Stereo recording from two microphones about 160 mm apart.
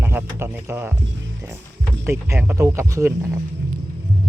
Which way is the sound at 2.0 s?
15° right (ahead or behind).